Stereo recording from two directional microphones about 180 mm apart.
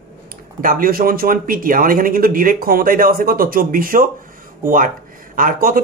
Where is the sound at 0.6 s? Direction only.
50° right (ahead or behind).